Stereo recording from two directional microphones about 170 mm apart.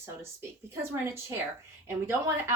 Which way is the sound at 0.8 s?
15° right (ahead or behind).